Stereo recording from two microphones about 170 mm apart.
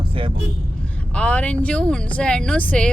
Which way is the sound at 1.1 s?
10° left (ahead or behind).